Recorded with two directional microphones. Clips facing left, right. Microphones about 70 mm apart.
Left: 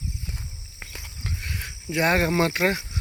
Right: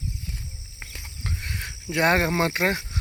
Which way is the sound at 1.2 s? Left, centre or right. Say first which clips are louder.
Right 1 dB; right.